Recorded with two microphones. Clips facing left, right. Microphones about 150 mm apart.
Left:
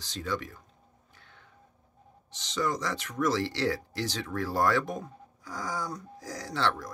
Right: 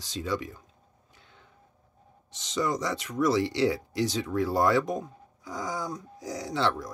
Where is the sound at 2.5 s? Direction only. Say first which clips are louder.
Right 2 dB; 15° right (ahead or behind).